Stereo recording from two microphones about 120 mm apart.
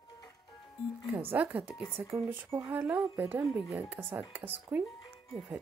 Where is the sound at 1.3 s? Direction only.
15° right (ahead or behind).